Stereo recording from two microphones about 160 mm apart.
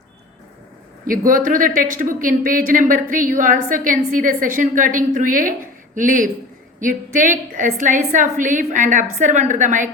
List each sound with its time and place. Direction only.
1.0 s a woman's voice: 60° right (ahead or behind)